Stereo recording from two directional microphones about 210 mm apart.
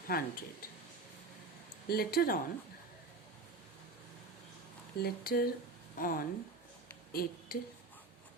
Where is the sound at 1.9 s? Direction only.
45° left (ahead or behind).